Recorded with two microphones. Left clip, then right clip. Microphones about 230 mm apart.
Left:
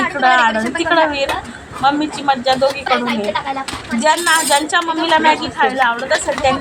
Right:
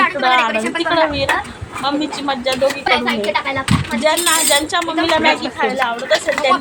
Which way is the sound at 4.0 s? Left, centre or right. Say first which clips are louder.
Left 3 dB; centre.